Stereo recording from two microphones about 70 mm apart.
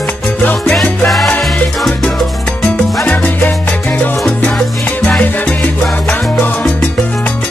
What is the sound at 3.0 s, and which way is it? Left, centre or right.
Salsa music, left.